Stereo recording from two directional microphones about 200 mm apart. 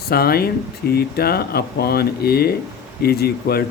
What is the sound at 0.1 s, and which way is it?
Speech, 50° left (ahead or behind).